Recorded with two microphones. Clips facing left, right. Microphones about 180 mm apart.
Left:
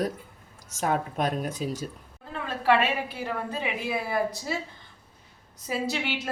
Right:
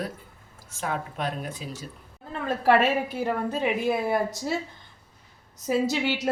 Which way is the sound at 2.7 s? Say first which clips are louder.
Right 2 dB; 45° right (ahead or behind).